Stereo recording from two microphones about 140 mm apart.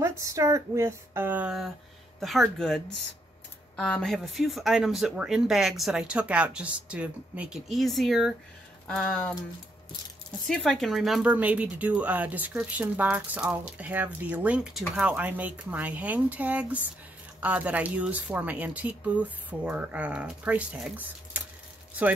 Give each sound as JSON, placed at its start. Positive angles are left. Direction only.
{"t": 0.0, "sound": "speech", "side_deg": -20}
{"t": 8.8, "sound": "a sound", "side_deg": 5}
{"t": 10.5, "sound": "speech", "side_deg": 5}